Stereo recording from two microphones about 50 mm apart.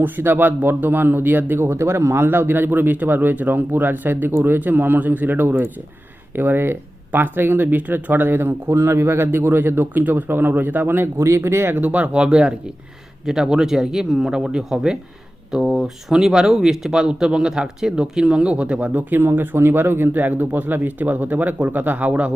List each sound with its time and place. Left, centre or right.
0.0 s a man's voice: right
1.5 s a man's voice: right
11.2 s speech: right
11.8 s speech: right
13.2 s speech: centre
16.1 s speech: centre
18.9 s a man's voice: right